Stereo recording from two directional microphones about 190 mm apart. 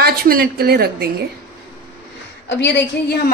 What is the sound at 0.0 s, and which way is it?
A woman's voice, 55° right (ahead or behind).